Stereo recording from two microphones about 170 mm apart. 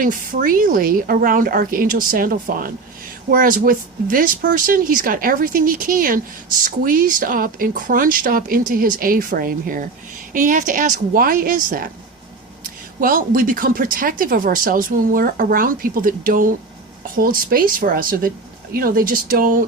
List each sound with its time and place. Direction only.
0.0 s a woman's voice: 55° right (ahead or behind)
13.0 s speech: 55° right (ahead or behind)